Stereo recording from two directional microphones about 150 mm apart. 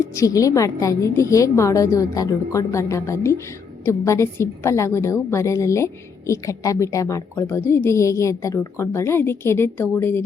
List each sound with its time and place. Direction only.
0.2 s a woman's voice: 20° left (ahead or behind)